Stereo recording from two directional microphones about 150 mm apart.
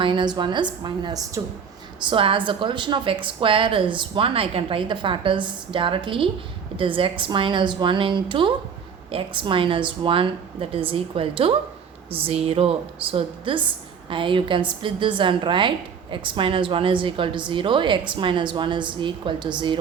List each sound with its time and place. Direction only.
0.0 s a woman's voice: 30° right (ahead or behind)